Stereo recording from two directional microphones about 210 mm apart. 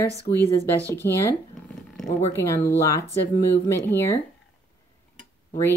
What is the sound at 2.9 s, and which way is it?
Speech, 15° left (ahead or behind).